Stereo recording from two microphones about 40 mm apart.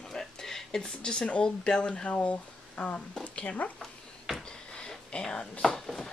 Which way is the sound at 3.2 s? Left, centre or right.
Left.